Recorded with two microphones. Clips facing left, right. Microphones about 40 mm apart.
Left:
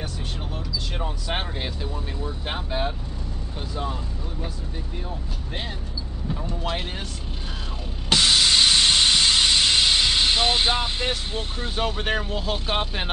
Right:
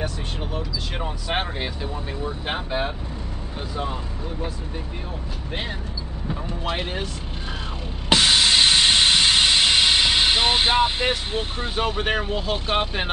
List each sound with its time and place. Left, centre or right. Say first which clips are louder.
0.9 s speech: right 4 dB; centre
6.2 s speech: right 1 dB; centre
8.1 s steam: right 2 dB; centre